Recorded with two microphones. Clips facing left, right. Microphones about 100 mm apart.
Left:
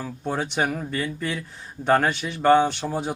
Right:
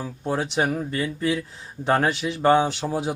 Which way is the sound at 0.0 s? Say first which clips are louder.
Right 1 dB; 5° right (ahead or behind).